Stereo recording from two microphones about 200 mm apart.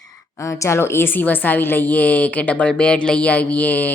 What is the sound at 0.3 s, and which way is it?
Speech, 15° left (ahead or behind).